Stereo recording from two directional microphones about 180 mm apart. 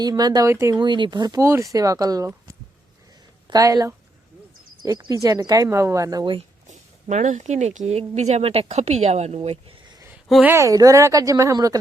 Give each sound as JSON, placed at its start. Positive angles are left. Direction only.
{"t": 0.0, "sound": "speech", "side_deg": -20}
{"t": 3.4, "sound": "a woman's voice", "side_deg": -20}
{"t": 6.7, "sound": "speech", "side_deg": -40}
{"t": 10.2, "sound": "speech", "side_deg": 0}
{"t": 10.5, "sound": "speech", "side_deg": -15}